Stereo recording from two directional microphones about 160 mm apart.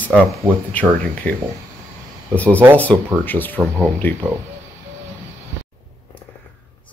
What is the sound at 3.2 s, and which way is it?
Speech, 10° left (ahead or behind).